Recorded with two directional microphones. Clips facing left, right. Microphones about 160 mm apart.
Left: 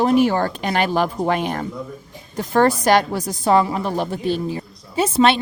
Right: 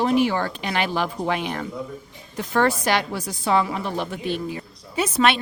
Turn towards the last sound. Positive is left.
turn(degrees=30)  # may be behind; listen again after turning